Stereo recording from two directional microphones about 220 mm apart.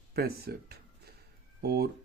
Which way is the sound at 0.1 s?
45° right (ahead or behind).